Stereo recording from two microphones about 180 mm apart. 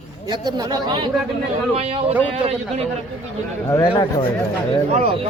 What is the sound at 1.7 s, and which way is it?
Speech, 35° right (ahead or behind).